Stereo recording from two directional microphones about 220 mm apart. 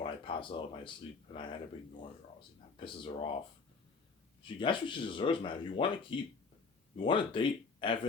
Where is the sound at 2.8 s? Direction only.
20° left (ahead or behind).